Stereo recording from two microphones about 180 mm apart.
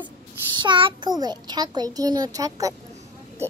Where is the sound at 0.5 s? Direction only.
25° right (ahead or behind).